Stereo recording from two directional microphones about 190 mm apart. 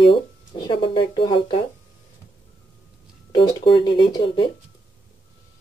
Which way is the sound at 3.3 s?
20° left (ahead or behind).